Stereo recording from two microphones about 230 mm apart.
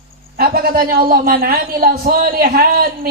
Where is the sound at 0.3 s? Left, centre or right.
Right.